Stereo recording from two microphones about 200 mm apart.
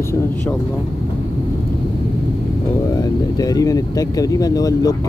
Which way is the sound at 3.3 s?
20° left (ahead or behind).